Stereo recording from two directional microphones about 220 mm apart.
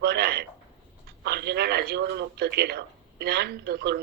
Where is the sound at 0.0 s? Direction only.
45° right (ahead or behind).